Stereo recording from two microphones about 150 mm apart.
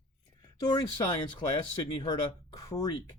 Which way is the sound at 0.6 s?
25° left (ahead or behind).